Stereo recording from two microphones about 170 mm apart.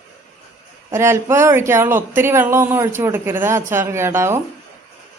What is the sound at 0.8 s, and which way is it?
Speech, 15° right (ahead or behind).